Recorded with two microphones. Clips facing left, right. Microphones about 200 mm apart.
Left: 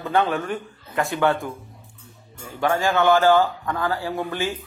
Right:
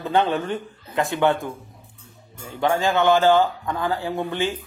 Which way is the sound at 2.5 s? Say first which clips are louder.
Even; 15° right (ahead or behind).